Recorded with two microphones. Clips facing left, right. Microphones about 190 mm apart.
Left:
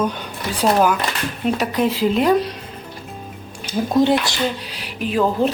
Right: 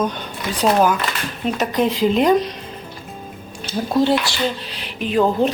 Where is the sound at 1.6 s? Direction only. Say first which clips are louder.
Right 3 dB; 5° left (ahead or behind).